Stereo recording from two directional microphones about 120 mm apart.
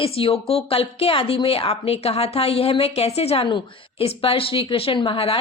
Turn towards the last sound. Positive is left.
turn(degrees=45)  # may be behind; listen again after turning